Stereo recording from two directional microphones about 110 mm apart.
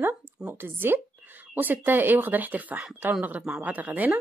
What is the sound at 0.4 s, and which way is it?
Speech, 15° right (ahead or behind).